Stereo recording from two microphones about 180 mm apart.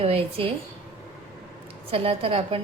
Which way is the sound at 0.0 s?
35° right (ahead or behind).